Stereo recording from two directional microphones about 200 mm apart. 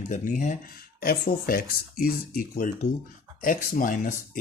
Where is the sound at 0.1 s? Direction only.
40° left (ahead or behind).